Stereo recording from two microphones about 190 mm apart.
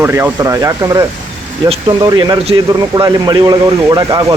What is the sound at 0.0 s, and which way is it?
A man's voice, 10° right (ahead or behind).